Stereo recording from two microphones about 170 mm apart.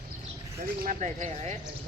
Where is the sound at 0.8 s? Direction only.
50° right (ahead or behind).